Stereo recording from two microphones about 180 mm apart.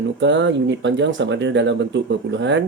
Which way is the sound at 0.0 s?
85° right.